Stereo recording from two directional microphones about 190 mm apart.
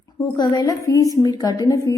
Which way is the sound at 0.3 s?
20° left (ahead or behind).